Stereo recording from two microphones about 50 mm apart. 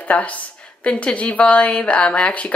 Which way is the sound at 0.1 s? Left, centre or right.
Left.